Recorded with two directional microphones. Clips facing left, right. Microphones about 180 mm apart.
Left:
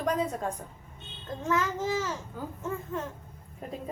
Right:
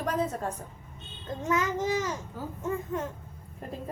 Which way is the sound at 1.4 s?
15° right (ahead or behind).